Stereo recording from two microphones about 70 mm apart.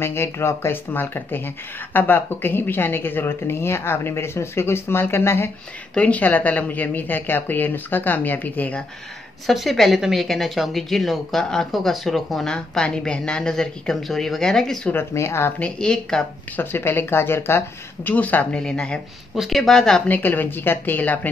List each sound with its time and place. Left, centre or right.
0.0 s a woman's voice: left
5.9 s speech: centre
9.5 s a woman's voice: centre
15.1 s a woman's voice: left
15.6 s a woman's voice: centre
16.5 s a woman's voice: left
18.1 s a woman's voice: left
19.3 s speech: centre
20.1 s speech: left